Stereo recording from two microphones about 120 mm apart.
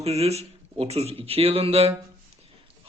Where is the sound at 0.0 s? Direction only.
60° right (ahead or behind).